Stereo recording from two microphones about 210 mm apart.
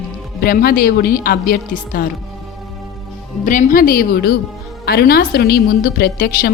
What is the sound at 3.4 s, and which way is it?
A woman's voice, 40° left (ahead or behind).